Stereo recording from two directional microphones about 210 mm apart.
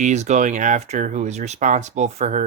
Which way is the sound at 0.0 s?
35° right (ahead or behind).